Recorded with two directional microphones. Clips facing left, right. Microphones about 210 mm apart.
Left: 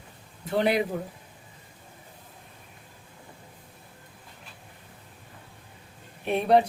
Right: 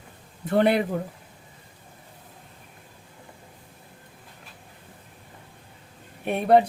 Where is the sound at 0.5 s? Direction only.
55° right (ahead or behind).